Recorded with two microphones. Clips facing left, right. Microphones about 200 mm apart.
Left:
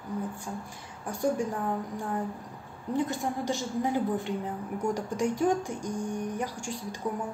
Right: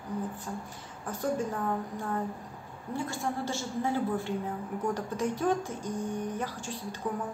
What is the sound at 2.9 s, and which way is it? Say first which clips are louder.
A woman's voice: left 4 dB; 20° left (ahead or behind).